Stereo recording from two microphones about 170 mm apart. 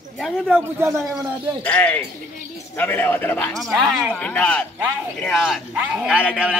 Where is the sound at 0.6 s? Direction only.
10° right (ahead or behind).